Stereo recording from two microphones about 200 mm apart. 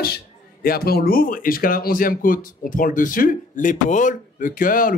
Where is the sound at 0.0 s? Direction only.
50° left (ahead or behind).